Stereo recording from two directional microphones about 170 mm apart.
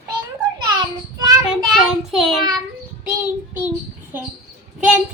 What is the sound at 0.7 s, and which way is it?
Child singing, 25° right (ahead or behind).